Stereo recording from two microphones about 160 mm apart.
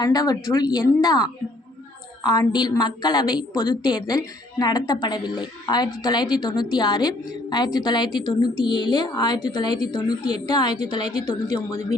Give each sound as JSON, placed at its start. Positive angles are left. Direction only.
{"t": 0.0, "sound": "a woman's voice", "side_deg": 25}